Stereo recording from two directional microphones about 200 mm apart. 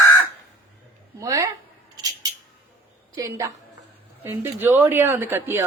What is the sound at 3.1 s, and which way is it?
A woman's voice, 15° right (ahead or behind).